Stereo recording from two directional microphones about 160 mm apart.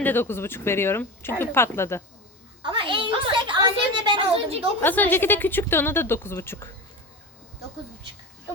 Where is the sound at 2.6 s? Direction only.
30° right (ahead or behind).